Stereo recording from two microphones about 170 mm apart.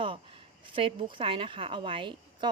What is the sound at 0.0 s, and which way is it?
A woman's voice, 30° right (ahead or behind).